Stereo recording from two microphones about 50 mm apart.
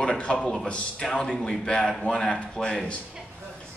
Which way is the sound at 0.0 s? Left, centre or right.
Left.